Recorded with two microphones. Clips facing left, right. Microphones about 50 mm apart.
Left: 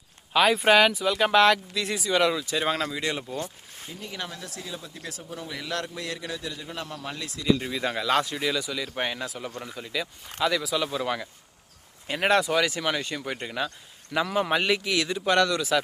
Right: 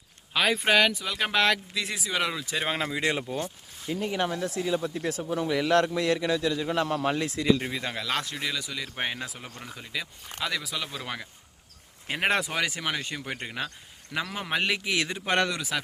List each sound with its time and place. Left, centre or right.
0.3 s speech: centre
2.9 s speech: right
4.6 s a man's voice: right
5.3 s a man's voice: right
7.2 s speech: right
7.7 s speech: centre
12.0 s speech: centre
14.1 s speech: centre
14.9 s speech: right